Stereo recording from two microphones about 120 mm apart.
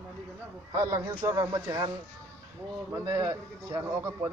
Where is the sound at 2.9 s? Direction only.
25° right (ahead or behind).